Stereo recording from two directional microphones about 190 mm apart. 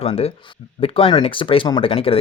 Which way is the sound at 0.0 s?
30° left (ahead or behind).